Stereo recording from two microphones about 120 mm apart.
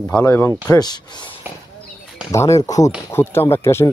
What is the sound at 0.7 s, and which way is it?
Speech, 35° left (ahead or behind).